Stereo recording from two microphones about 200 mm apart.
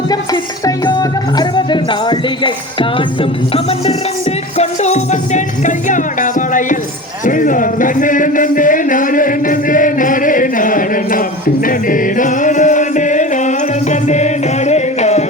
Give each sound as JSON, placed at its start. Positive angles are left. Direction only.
{"t": 0.6, "sound": "music", "side_deg": 20}
{"t": 7.3, "sound": "a sound", "side_deg": 40}
{"t": 11.6, "sound": "music", "side_deg": 45}